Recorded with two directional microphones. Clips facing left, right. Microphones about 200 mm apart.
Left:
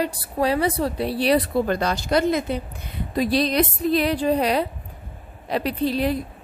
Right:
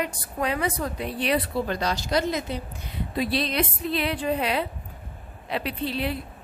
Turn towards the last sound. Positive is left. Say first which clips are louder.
# left 6 dB
turn(degrees=40)  # may be behind; listen again after turning